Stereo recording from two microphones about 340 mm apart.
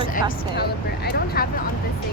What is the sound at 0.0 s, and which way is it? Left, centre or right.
Speech, left.